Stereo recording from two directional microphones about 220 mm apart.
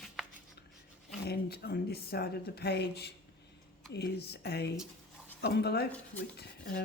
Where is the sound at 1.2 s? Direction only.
45° left (ahead or behind).